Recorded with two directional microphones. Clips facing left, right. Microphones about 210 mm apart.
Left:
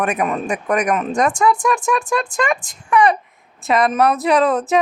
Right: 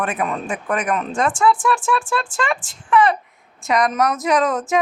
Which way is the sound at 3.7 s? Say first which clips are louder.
Left 3 dB; 25° left (ahead or behind).